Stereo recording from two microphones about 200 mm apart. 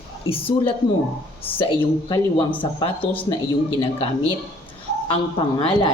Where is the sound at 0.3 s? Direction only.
25° left (ahead or behind).